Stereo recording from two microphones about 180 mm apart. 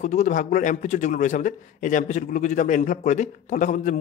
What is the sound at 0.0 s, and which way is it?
A man's voice, 40° left (ahead or behind).